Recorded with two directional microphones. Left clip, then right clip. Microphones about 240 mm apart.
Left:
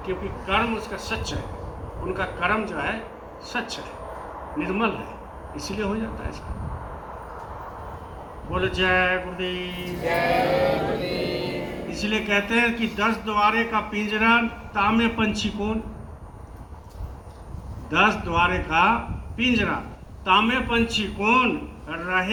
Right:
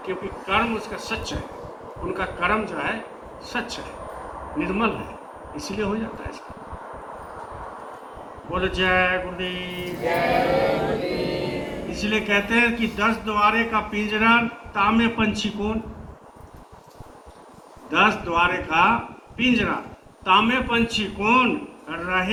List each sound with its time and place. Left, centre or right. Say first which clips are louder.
0.0 s a man's voice: even; left
8.4 s a man's voice: right 1 dB; left
11.0 s music: right 1 dB; left
11.9 s a man's voice: right 2 dB; centre
17.9 s a man's voice: right 1 dB; left